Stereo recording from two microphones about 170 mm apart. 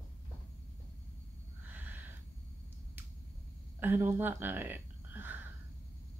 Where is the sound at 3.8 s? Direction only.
10° right (ahead or behind).